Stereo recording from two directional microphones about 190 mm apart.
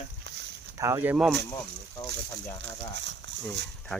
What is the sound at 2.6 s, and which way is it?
Speech, 70° right (ahead or behind).